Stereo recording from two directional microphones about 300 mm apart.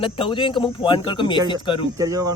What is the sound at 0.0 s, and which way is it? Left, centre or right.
Speech, centre.